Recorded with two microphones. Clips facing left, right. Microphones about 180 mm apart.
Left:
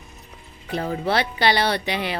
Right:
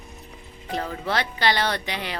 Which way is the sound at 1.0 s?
15° left (ahead or behind).